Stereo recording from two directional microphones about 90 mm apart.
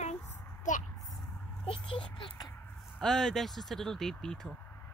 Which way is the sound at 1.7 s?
75° left (ahead or behind).